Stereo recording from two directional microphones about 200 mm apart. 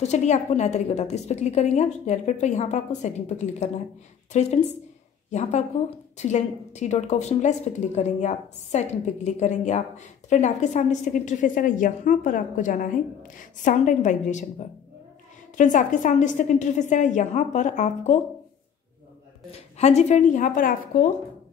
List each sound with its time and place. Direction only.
0.0 s a woman's voice: 35° left (ahead or behind)
15.5 s a woman's voice: 40° left (ahead or behind)
19.8 s a woman's voice: 35° left (ahead or behind)